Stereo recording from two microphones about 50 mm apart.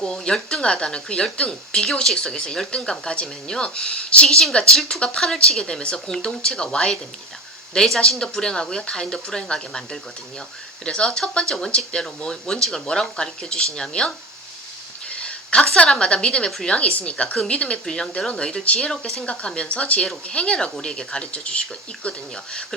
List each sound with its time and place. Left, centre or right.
0.0 s speech: centre
4.3 s speech: centre
15.1 s a sound: left
15.9 s speech: centre
17.3 s speech: centre
18.9 s speech: centre
19.2 s speech: left